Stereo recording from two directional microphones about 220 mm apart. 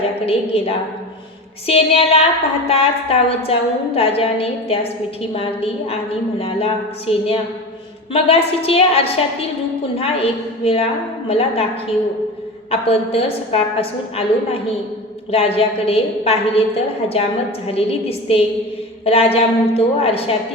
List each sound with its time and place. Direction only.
0.3 s a woman's voice: 25° left (ahead or behind)